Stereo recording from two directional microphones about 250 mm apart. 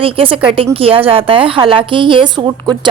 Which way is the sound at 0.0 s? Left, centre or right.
Right.